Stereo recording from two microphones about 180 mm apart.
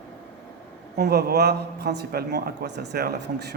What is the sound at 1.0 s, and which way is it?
Speech, 65° right (ahead or behind).